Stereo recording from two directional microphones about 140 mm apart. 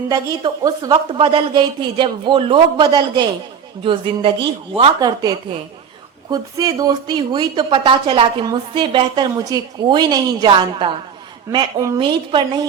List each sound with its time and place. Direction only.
0.1 s speech: 25° right (ahead or behind)
4.9 s speech: 30° right (ahead or behind)
6.3 s speech: 25° right (ahead or behind)